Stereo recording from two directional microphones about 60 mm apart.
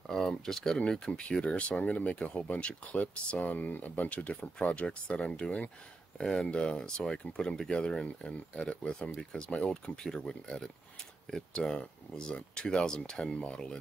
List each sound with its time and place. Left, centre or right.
0.0 s speech: centre